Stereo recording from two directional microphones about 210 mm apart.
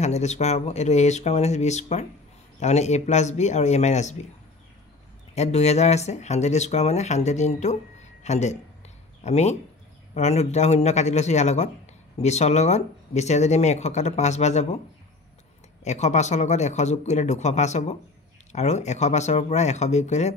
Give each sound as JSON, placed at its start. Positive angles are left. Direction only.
{"t": 0.0, "sound": "speech", "side_deg": 35}
{"t": 5.3, "sound": "speech", "side_deg": 30}
{"t": 15.8, "sound": "speech", "side_deg": 35}